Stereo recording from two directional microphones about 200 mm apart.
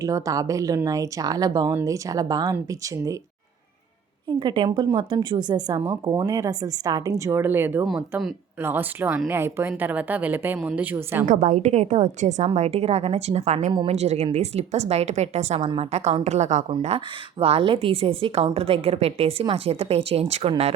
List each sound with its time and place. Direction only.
0.0 s speech: 15° right (ahead or behind)
4.3 s a woman's voice: 25° right (ahead or behind)
11.3 s a woman's voice: 40° right (ahead or behind)